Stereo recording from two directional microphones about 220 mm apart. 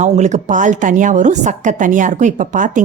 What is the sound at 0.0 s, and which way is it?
Speech, 35° right (ahead or behind).